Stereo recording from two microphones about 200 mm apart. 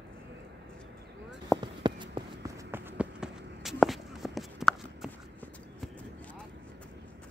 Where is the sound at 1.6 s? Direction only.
25° right (ahead or behind); by 3.7 s 5° right (ahead or behind).